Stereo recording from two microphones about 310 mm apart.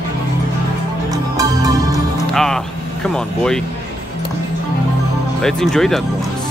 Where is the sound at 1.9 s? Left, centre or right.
Centre.